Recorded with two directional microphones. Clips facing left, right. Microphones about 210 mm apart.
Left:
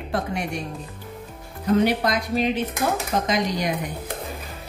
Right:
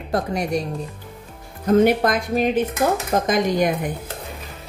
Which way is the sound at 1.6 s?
50° right (ahead or behind).